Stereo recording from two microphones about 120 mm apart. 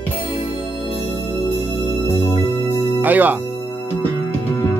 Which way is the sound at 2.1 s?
20° left (ahead or behind).